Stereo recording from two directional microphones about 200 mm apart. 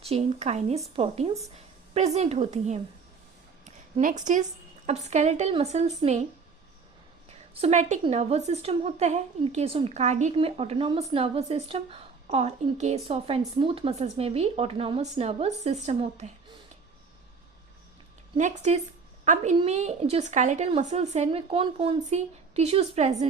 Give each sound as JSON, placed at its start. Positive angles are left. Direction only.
{"t": 0.0, "sound": "a woman's voice", "side_deg": -30}
{"t": 4.0, "sound": "a woman's voice", "side_deg": -40}
{"t": 7.5, "sound": "a woman's voice", "side_deg": -30}
{"t": 18.3, "sound": "a woman's voice", "side_deg": -35}